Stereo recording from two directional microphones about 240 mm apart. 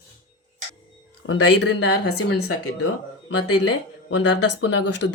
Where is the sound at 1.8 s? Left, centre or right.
Left.